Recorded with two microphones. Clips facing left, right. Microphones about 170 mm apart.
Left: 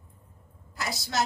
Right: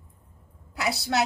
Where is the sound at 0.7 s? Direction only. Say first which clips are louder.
Right 6 dB; 65° right (ahead or behind).